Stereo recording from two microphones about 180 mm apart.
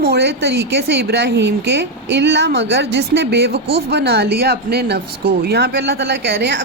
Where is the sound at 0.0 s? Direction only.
65° right (ahead or behind).